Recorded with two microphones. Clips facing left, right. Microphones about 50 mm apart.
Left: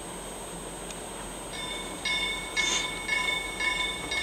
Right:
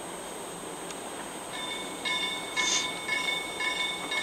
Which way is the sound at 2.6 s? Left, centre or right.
Centre.